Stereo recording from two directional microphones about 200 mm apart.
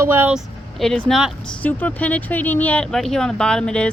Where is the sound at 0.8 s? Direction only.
5° left (ahead or behind).